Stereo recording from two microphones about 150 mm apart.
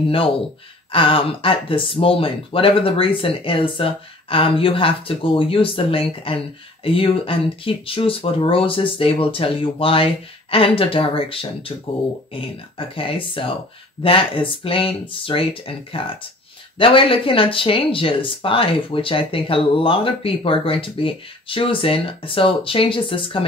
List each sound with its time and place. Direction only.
0.9 s speech: 35° left (ahead or behind)
12.4 s speech: 35° left (ahead or behind)